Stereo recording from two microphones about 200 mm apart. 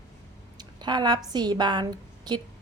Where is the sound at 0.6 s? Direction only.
20° right (ahead or behind).